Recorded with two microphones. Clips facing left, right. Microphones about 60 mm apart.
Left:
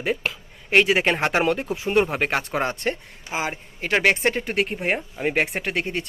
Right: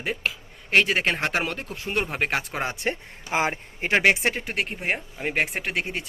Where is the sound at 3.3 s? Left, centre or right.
Right.